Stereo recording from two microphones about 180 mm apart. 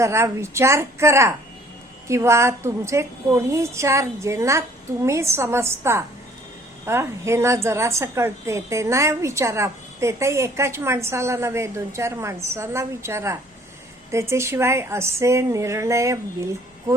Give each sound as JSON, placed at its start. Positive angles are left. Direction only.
{"t": 0.0, "sound": "a woman's voice", "side_deg": -15}